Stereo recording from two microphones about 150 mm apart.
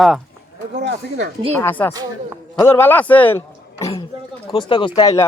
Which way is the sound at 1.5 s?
10° left (ahead or behind).